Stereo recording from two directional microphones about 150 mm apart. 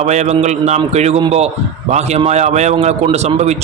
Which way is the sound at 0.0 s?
50° right (ahead or behind).